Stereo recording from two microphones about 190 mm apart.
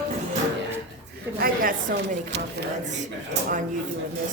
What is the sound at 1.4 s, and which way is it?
Speech, 50° right (ahead or behind).